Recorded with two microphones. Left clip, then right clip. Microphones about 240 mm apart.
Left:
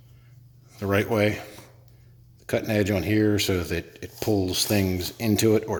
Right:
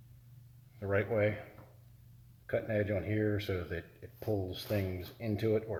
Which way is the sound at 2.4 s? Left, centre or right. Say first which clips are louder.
Left 9 dB; left.